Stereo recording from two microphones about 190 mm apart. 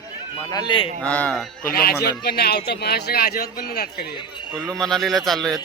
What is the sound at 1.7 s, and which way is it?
A man's voice, 55° left (ahead or behind).